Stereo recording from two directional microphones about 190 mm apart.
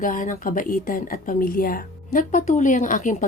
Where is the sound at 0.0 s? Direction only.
45° left (ahead or behind).